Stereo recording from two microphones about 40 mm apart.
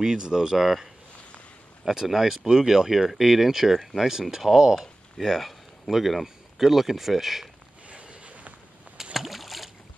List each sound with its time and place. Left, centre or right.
0.0 s speech: centre
0.6 s speech: centre
1.9 s speech: centre
7.9 s a sound: right
9.1 s rowboat: centre